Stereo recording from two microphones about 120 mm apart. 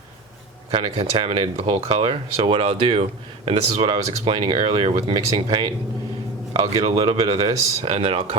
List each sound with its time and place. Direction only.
0.7 s speech: 50° right (ahead or behind)
5.1 s speech: 40° right (ahead or behind)